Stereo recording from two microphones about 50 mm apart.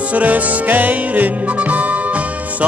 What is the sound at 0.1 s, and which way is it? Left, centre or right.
Music, right.